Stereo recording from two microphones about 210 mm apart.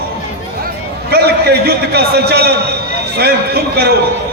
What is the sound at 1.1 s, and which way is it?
A man's voice, 50° right (ahead or behind).